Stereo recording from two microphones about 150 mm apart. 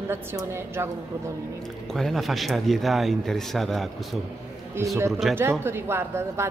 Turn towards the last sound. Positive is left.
turn(degrees=-15)  # may be behind; listen again after turning